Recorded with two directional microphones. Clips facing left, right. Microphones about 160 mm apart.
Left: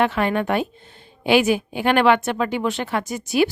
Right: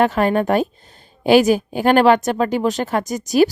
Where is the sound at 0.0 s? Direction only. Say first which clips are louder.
Right 4 dB; 40° right (ahead or behind).